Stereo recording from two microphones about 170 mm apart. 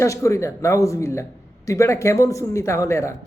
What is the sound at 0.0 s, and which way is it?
A man's voice, 15° left (ahead or behind).